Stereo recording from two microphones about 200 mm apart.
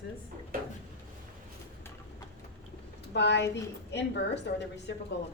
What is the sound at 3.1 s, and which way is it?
A woman's voice, 60° left (ahead or behind).